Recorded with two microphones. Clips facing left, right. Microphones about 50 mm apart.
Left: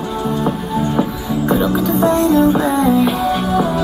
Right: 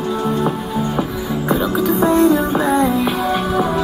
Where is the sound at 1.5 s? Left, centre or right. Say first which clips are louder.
Left 1 dB; centre.